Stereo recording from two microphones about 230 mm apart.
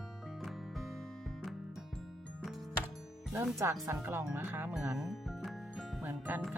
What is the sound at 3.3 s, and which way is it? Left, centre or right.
Speech, centre.